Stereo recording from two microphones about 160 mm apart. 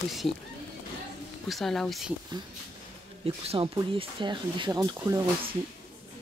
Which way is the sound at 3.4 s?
35° right (ahead or behind).